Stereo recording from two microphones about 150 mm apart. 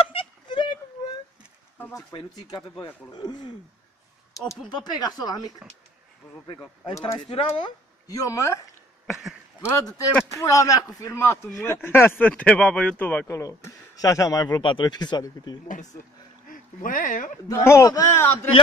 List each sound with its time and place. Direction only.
0.1 s a sound: 35° left (ahead or behind)
2.1 s a man's voice: 35° left (ahead or behind)
4.6 s a man's voice: 30° left (ahead or behind)
6.8 s a man's voice: 20° left (ahead or behind)
7.2 s speech: 35° left (ahead or behind)
8.1 s a man's voice: 20° left (ahead or behind)
9.0 s a sound: centre (ahead or behind)
9.6 s a man's voice: 20° left (ahead or behind)
13.4 s a man's voice: 20° left (ahead or behind)
15.7 s speech: 55° left (ahead or behind)
16.4 s speech: 65° left (ahead or behind)
17.6 s a man's voice: 20° left (ahead or behind)